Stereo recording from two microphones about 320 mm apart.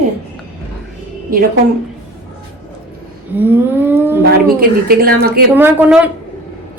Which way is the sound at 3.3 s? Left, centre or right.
Centre.